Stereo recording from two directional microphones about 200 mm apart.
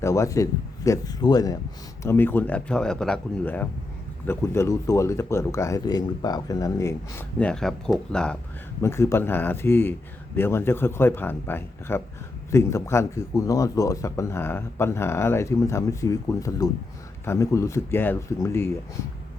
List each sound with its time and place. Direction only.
0.0 s speech: 15° left (ahead or behind)